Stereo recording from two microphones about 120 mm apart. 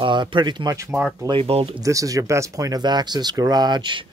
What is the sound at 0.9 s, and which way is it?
Speech, 15° right (ahead or behind).